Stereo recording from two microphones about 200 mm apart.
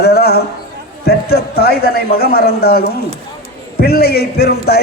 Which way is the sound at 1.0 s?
50° left (ahead or behind).